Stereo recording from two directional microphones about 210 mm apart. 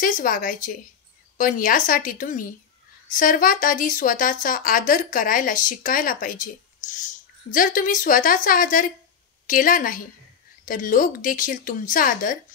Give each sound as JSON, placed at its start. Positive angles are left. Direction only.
{"t": 0.0, "sound": "speech", "side_deg": 40}